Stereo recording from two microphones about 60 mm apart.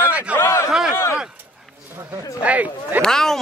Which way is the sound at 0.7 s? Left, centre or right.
Centre.